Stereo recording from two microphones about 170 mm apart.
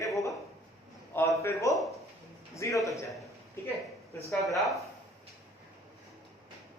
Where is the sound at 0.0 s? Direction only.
20° left (ahead or behind).